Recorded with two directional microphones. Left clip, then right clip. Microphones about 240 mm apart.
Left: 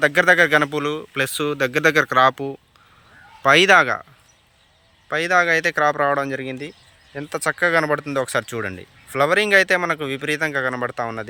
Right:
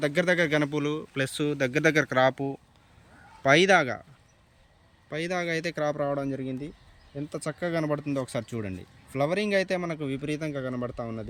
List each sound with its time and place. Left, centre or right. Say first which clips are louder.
0.0 s speech: left 10 dB; centre
5.0 s speech: left 13 dB; centre
6.2 s speech: left 7 dB; left
7.3 s speech: left 13 dB; centre
11.0 s speech: left 10 dB; left